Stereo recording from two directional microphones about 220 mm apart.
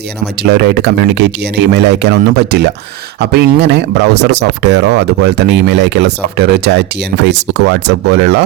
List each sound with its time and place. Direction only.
0.4 s speech: 45° right (ahead or behind)